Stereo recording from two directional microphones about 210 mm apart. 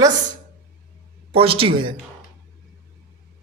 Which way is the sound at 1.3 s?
25° right (ahead or behind).